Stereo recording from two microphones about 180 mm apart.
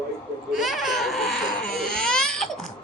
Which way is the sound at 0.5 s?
Centre (ahead or behind).